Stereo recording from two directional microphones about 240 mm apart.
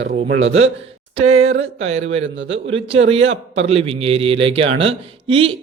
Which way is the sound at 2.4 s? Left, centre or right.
Right.